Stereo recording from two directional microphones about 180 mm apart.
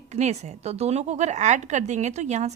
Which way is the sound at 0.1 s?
40° right (ahead or behind).